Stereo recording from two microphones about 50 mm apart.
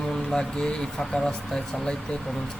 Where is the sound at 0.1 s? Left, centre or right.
Centre.